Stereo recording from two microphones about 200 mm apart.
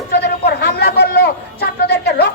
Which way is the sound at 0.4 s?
55° left (ahead or behind).